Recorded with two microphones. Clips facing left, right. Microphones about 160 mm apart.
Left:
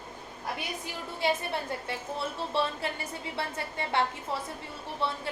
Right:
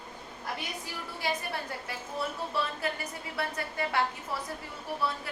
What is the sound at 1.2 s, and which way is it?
A woman's voice, 25° left (ahead or behind).